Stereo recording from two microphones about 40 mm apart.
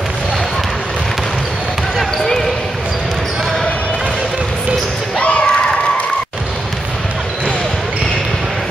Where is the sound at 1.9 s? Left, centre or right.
Centre.